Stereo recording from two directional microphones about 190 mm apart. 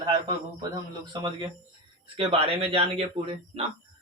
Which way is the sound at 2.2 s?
30° right (ahead or behind).